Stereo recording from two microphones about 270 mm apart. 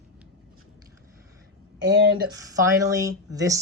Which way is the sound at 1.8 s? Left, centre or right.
Right.